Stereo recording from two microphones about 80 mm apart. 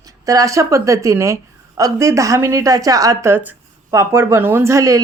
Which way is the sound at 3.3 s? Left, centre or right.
Right.